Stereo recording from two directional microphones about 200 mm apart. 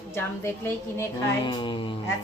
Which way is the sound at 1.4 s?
25° left (ahead or behind).